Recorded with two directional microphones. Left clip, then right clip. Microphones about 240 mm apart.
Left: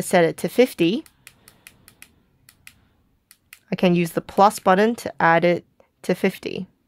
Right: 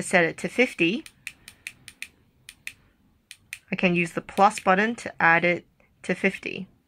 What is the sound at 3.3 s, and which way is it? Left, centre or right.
Speech, left.